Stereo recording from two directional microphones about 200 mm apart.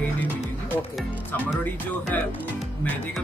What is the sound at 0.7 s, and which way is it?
Speech, 5° left (ahead or behind).